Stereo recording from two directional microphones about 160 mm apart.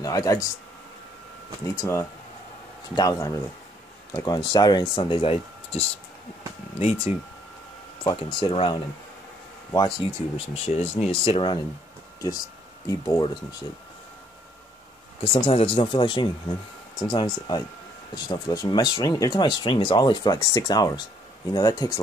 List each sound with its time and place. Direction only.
0.0 s speech: 20° left (ahead or behind)
1.8 s speech: 15° left (ahead or behind); by 5.8 s 35° left (ahead or behind)
6.8 s speech: 40° left (ahead or behind)
8.0 s speech: 30° left (ahead or behind)
12.8 s speech: 20° left (ahead or behind)
15.2 s speech: 35° left (ahead or behind)